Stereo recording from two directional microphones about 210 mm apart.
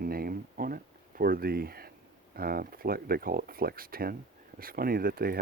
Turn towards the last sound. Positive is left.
turn(degrees=-45)  # may be behind; listen again after turning